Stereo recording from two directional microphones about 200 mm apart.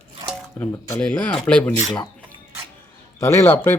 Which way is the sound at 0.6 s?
5° left (ahead or behind).